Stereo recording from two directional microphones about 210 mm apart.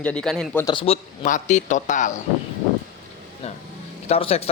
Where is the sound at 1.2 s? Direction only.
35° left (ahead or behind).